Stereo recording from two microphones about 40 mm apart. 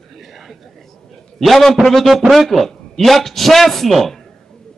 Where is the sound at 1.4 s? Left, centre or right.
Centre.